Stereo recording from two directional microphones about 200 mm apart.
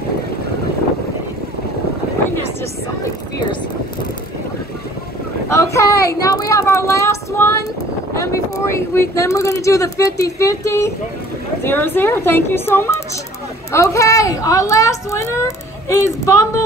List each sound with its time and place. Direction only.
5.5 s a woman's voice: 15° left (ahead or behind)